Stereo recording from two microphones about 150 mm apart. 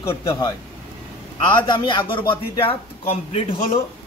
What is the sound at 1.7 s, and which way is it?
A man's voice, 30° left (ahead or behind).